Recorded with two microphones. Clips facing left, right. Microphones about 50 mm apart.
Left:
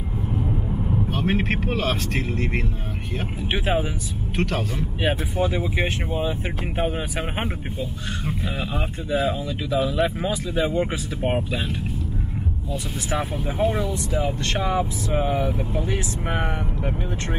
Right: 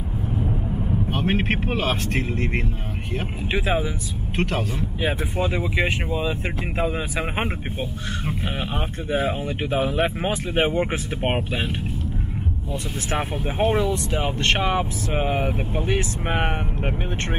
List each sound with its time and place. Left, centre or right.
1.1 s speech: right
3.4 s speech: right
4.4 s a man's voice: right
5.4 s speech: right
6.8 s speech: right
8.5 s speech: right
13.1 s speech: right
14.4 s speech: right